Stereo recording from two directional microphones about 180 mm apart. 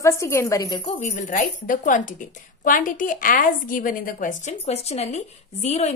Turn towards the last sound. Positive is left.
turn(degrees=35)  # may be behind; listen again after turning